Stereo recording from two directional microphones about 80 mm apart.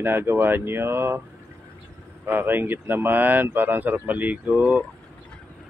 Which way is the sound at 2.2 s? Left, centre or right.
Right.